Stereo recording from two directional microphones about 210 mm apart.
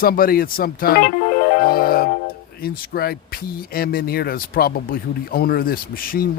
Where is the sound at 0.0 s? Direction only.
45° left (ahead or behind).